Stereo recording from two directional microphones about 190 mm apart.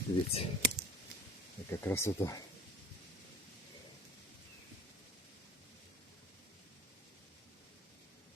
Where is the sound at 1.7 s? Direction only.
15° left (ahead or behind).